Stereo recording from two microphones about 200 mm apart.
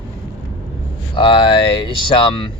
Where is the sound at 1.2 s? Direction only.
25° left (ahead or behind).